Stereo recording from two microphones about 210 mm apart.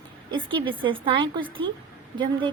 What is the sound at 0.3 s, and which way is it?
A woman's voice, 25° right (ahead or behind).